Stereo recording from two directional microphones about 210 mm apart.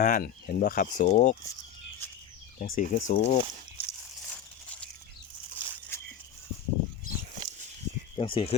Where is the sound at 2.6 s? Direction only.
40° left (ahead or behind).